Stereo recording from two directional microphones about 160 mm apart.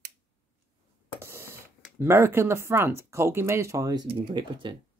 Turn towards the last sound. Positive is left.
turn(degrees=-30)  # may be behind; listen again after turning